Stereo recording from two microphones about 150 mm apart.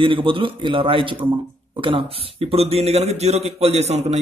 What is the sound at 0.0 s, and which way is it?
A man's voice, 35° right (ahead or behind).